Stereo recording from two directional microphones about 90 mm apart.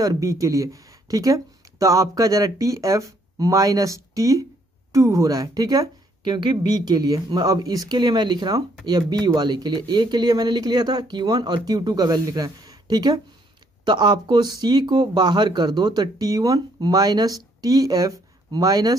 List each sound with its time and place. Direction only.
0.0 s a woman's voice: 40° right (ahead or behind)